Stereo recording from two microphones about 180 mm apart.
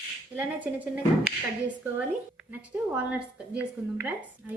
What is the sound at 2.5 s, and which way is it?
A woman's voice, 5° right (ahead or behind).